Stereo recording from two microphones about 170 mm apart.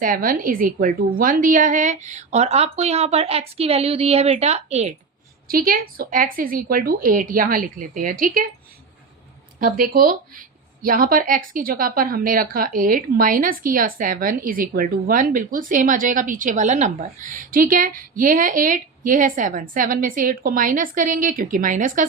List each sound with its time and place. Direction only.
0.0 s a woman's voice: 55° right (ahead or behind); by 4.9 s 40° right (ahead or behind)
5.5 s a woman's voice: 60° right (ahead or behind)
9.6 s a woman's voice: 55° right (ahead or behind)